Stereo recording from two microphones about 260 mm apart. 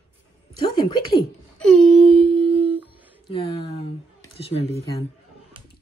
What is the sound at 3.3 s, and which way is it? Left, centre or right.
Speech, left.